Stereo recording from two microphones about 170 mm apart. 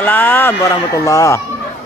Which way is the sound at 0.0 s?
10° left (ahead or behind).